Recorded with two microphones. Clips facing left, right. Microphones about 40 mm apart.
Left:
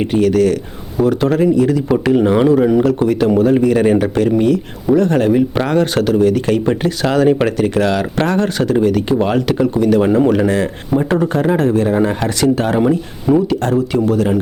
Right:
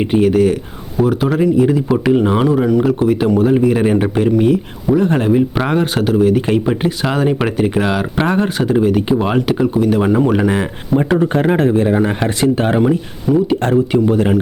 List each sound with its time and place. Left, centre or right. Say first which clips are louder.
0.1 s speech: even; centre
1.0 s speech: left 1 dB; centre
1.5 s speech: right 1 dB; centre
2.0 s speech: left 2 dB; centre
3.6 s speech: left 1 dB; centre
12.8 s speech: even; centre
13.7 s speech: right 2 dB; centre